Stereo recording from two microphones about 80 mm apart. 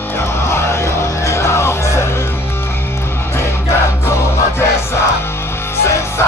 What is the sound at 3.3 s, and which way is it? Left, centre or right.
Music, left.